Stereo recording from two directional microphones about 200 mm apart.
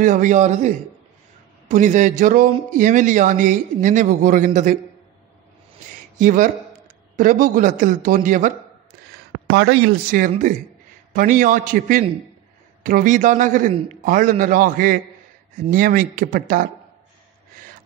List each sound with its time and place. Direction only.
0.0 s a man's voice: 40° right (ahead or behind)
6.1 s a man's voice: 45° right (ahead or behind)
9.5 s a man's voice: 55° right (ahead or behind)